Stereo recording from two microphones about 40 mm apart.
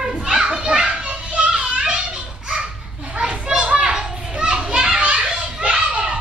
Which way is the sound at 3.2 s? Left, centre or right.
Right.